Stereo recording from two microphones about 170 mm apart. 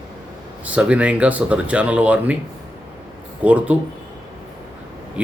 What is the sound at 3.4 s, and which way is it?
Speech, 10° right (ahead or behind).